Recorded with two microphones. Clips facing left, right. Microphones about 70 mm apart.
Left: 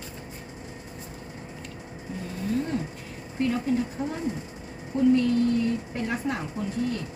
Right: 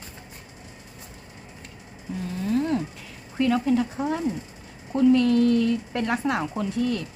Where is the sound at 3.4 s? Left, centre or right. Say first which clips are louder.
Right 4 dB; right.